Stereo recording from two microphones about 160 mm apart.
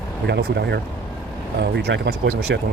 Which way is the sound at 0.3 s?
90° right.